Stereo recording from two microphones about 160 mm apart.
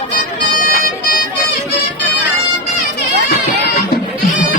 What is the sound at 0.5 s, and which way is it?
Bagpipes, 65° left (ahead or behind).